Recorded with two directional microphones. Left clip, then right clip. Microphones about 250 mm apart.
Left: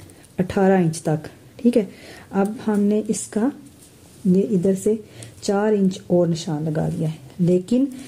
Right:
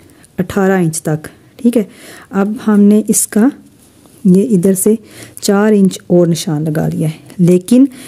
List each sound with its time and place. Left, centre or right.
0.4 s speech: right